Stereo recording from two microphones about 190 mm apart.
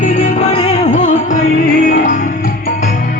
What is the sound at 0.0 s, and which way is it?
Music, 40° left (ahead or behind).